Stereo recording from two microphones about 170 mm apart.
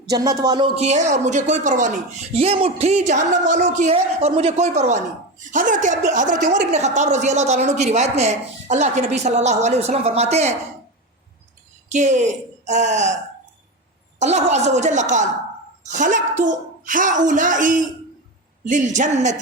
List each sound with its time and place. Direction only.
0.1 s music: 20° right (ahead or behind)
0.8 s speech: 40° right (ahead or behind)
2.3 s speech: 35° right (ahead or behind)
11.9 s speech: 45° right (ahead or behind)
14.2 s speech: 40° right (ahead or behind)